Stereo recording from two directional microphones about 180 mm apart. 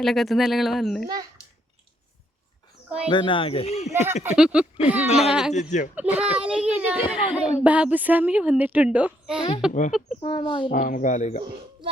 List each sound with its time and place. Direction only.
0.0 s speech: centre (ahead or behind)
1.0 s a child's voice: 20° right (ahead or behind)
3.1 s speech: 25° left (ahead or behind)
3.9 s a woman's voice: 10° right (ahead or behind)
5.0 s speech: 35° left (ahead or behind)
5.3 s speech: 5° right (ahead or behind)
5.5 s speech: 40° left (ahead or behind)
5.9 s a woman's voice: 10° right (ahead or behind)
10.2 s speech: 30° left (ahead or behind)
10.7 s speech: 50° left (ahead or behind)